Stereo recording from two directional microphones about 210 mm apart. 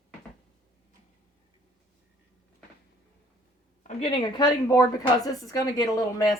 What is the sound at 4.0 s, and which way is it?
A woman's voice, 25° left (ahead or behind).